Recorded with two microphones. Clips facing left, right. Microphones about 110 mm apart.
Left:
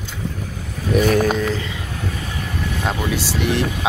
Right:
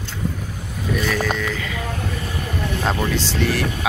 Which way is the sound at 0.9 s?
50° left (ahead or behind).